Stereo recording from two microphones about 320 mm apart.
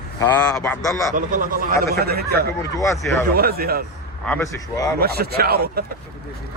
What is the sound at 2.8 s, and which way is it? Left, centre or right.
Speech, centre.